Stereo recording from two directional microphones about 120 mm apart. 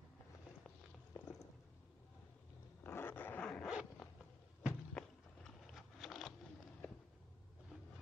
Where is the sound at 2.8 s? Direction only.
20° left (ahead or behind).